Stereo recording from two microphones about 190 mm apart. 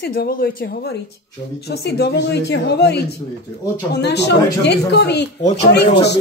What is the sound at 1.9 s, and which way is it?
A woman's voice, 60° left (ahead or behind).